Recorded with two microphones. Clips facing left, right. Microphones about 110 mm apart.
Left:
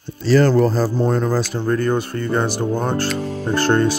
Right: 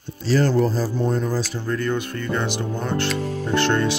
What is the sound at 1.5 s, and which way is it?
Speech, 50° left (ahead or behind).